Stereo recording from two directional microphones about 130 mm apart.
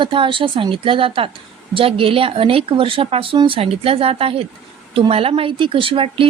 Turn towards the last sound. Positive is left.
turn(degrees=-45)  # may be behind; listen again after turning